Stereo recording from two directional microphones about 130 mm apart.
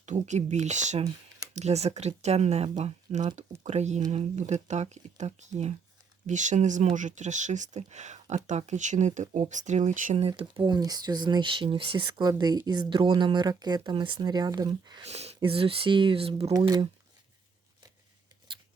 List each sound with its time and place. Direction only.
0.3 s speech: 65° right (ahead or behind)
6.2 s speech: 70° right (ahead or behind)
10.2 s speech: 50° right (ahead or behind)
10.7 s speech: 30° right (ahead or behind)
15.0 s speech: 55° right (ahead or behind)
16.5 s speech: 30° right (ahead or behind)